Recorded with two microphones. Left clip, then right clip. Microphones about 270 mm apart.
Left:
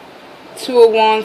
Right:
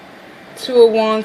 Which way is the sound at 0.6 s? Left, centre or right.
Centre.